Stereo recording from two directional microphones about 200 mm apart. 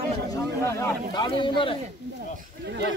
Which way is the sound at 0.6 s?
15° left (ahead or behind).